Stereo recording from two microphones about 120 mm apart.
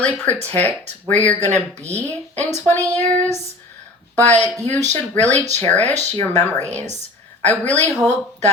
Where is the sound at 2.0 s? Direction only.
15° left (ahead or behind).